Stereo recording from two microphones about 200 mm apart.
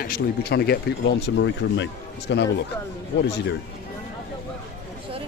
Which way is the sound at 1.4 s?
65° left (ahead or behind).